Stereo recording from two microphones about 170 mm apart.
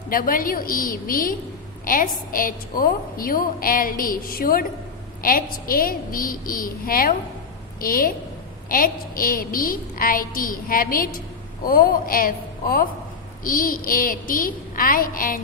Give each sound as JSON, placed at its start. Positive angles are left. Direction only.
{"t": 0.1, "sound": "a woman's voice", "side_deg": 55}